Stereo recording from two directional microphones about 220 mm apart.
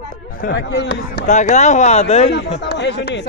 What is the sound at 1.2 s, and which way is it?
Speech, 35° left (ahead or behind).